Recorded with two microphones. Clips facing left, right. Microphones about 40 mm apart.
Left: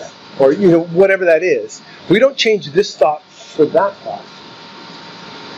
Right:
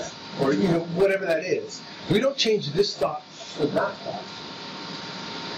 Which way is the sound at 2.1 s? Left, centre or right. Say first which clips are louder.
Left 10 dB; left.